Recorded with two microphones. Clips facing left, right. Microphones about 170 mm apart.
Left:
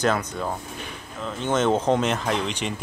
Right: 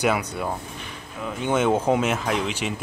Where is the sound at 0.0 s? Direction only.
10° right (ahead or behind).